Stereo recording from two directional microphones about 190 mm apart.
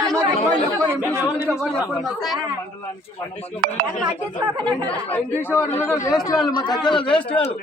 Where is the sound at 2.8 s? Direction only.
15° left (ahead or behind).